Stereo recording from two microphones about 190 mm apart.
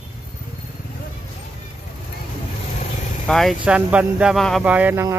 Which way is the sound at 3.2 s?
Centre (ahead or behind).